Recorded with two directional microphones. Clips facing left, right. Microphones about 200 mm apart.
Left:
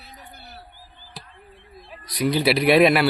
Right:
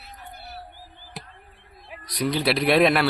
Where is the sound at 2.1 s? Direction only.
5° left (ahead or behind).